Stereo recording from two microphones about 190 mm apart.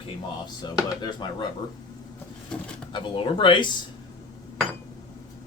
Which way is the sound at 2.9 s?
25° left (ahead or behind).